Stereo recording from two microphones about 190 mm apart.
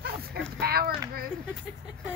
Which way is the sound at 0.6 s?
55° right (ahead or behind).